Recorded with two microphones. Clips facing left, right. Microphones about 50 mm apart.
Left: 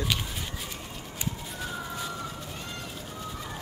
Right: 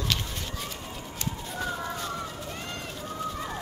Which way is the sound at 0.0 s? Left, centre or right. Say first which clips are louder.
Even; centre.